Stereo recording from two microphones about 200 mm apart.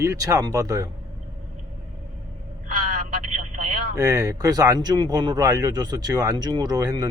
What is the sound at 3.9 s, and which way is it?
Speech, 15° right (ahead or behind).